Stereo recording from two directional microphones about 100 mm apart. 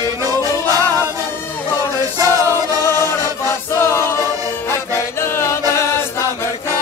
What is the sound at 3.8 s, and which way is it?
Choir, 25° left (ahead or behind).